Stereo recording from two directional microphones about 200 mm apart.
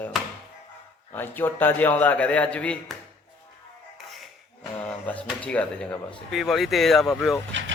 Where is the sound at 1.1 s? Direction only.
10° left (ahead or behind).